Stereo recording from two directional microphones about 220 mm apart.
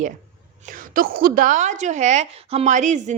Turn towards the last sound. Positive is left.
turn(degrees=-35)  # may be behind; listen again after turning